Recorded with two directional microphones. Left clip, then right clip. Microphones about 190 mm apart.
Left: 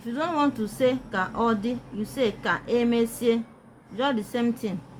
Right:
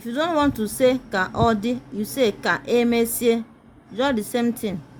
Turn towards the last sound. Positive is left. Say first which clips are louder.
# right 4 dB
turn(degrees=-40)  # may be behind; listen again after turning